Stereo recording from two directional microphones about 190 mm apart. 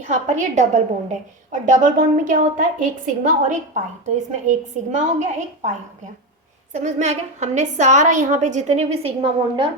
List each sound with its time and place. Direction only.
0.0 s a woman's voice: 40° right (ahead or behind)
6.7 s a woman's voice: 35° right (ahead or behind)